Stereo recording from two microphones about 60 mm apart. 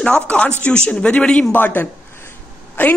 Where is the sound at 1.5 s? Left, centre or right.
Left.